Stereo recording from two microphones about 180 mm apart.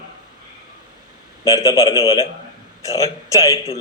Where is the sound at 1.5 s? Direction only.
20° left (ahead or behind).